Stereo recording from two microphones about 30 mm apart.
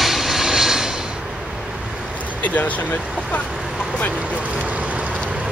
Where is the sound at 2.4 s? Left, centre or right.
Left.